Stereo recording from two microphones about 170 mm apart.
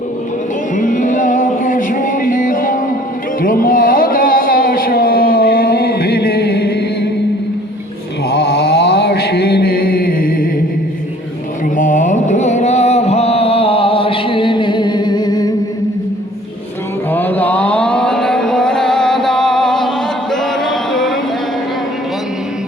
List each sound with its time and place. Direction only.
0.8 s music: 50° left (ahead or behind)
3.4 s a sound: 55° left (ahead or behind); by 7.1 s 70° left (ahead or behind)
8.3 s mantra: 70° left (ahead or behind)
11.8 s music: 50° left (ahead or behind); by 15.5 s 25° left (ahead or behind)
17.1 s chant: 10° left (ahead or behind)
20.3 s music: centre (ahead or behind)